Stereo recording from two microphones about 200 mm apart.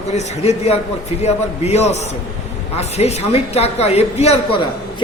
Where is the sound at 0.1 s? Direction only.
35° left (ahead or behind).